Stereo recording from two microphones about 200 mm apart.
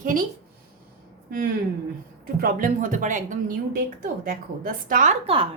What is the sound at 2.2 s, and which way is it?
A woman's voice, 45° right (ahead or behind).